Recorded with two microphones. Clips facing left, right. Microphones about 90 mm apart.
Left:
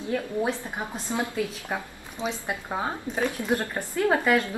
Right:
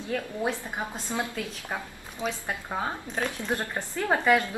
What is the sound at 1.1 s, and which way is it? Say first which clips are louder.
A woman's voice: left 5 dB; 20° left (ahead or behind).